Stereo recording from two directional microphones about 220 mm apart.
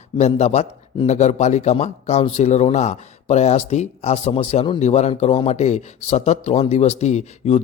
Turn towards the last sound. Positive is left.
turn(degrees=30)  # may be behind; listen again after turning